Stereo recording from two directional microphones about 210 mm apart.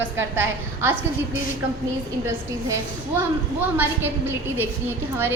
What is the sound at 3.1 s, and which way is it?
A woman's voice, 10° right (ahead or behind).